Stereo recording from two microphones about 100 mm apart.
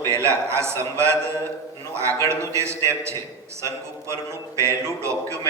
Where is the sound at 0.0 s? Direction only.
30° right (ahead or behind).